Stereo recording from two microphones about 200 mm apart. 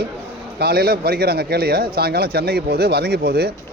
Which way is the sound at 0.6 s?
50° right (ahead or behind).